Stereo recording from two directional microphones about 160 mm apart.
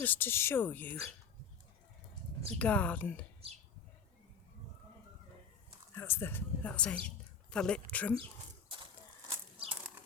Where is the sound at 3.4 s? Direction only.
40° right (ahead or behind).